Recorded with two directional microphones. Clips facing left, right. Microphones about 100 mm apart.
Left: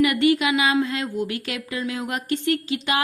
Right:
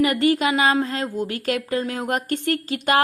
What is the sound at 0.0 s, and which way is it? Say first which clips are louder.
A woman's voice: even; 35° right (ahead or behind).